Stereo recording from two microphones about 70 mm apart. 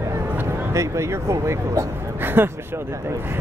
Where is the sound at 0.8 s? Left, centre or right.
Right.